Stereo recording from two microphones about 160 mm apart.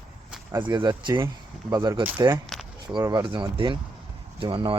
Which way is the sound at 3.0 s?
25° right (ahead or behind).